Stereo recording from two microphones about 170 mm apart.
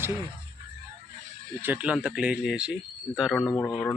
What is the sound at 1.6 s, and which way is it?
Speech, 10° right (ahead or behind).